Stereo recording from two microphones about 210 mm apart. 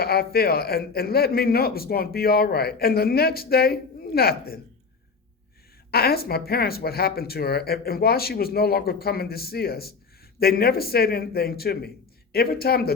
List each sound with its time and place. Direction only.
0.0 s a man's voice: 45° left (ahead or behind)
5.9 s a man's voice: 45° left (ahead or behind)